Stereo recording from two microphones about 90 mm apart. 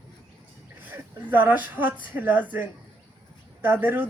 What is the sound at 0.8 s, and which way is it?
Speech, 20° right (ahead or behind).